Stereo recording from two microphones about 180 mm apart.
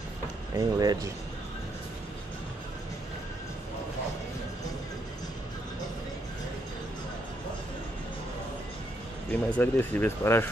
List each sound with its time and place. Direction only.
0.6 s speech: 20° right (ahead or behind)
9.3 s speech: 10° left (ahead or behind)